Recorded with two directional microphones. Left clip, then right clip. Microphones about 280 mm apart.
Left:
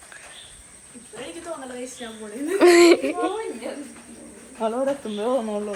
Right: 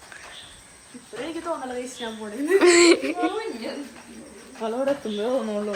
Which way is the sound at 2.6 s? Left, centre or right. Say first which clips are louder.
Left 2 dB; centre.